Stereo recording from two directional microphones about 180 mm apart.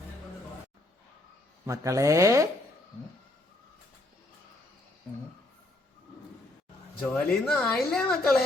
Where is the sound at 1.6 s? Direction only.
15° right (ahead or behind).